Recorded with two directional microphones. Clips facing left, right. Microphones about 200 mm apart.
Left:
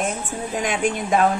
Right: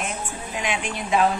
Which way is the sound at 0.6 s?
45° left (ahead or behind).